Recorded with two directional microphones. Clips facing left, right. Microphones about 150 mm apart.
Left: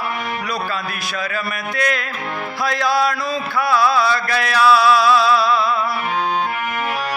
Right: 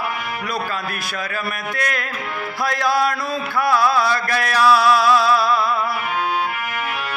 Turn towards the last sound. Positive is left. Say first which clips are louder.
# left 1 dB
turn(degrees=-50)  # may be behind; listen again after turning